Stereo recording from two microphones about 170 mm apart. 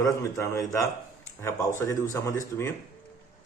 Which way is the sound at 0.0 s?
20° left (ahead or behind).